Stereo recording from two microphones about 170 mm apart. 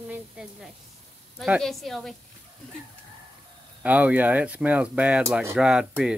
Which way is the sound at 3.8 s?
10° right (ahead or behind).